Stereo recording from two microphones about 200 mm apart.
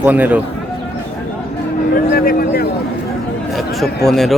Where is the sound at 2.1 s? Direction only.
45° left (ahead or behind).